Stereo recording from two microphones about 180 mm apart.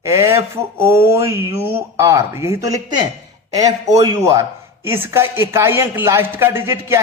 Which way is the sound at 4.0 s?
15° right (ahead or behind).